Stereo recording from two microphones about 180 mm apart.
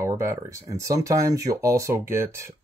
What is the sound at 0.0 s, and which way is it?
Speech, 15° right (ahead or behind).